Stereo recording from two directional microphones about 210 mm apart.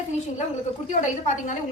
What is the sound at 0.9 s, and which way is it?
Speech, 35° left (ahead or behind).